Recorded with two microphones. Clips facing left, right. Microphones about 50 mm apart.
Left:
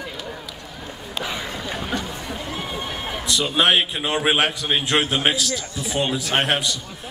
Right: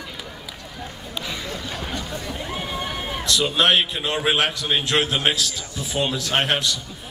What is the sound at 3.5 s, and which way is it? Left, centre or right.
A man's voice, centre.